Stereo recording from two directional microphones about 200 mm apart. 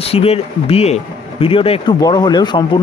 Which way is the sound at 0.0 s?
30° left (ahead or behind).